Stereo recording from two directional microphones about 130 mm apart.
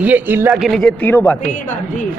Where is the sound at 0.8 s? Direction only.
10° left (ahead or behind).